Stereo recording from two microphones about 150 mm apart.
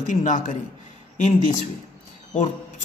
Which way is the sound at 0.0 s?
55° left (ahead or behind).